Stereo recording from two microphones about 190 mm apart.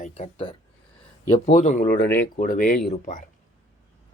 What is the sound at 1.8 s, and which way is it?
Speech, 50° left (ahead or behind).